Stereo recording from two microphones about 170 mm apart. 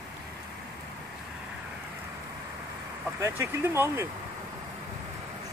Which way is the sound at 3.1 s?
15° right (ahead or behind).